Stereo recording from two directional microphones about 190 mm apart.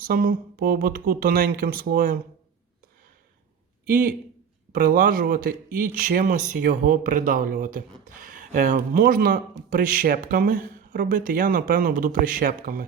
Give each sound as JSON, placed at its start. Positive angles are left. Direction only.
{"t": 0.0, "sound": "speech", "side_deg": -50}
{"t": 3.8, "sound": "speech", "side_deg": -45}